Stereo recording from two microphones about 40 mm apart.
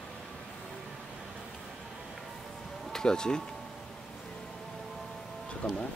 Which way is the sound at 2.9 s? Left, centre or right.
Centre.